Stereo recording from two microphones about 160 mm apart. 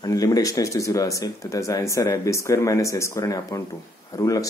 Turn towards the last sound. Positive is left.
turn(degrees=20)  # may be behind; listen again after turning